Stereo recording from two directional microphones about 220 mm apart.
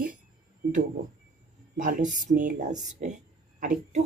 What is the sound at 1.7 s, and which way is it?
Speech, 35° right (ahead or behind).